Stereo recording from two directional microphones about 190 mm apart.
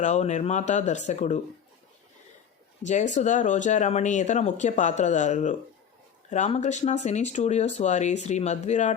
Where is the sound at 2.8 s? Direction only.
40° left (ahead or behind).